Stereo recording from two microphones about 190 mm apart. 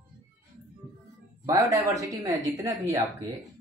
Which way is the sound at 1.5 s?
15° right (ahead or behind).